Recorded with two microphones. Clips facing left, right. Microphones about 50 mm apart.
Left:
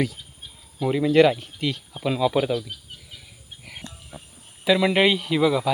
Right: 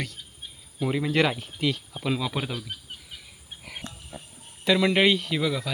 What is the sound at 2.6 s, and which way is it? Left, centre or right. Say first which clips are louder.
Bird: left 4 dB; centre.